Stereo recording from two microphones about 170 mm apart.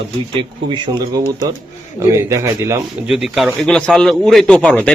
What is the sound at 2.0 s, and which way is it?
Speech, 20° right (ahead or behind).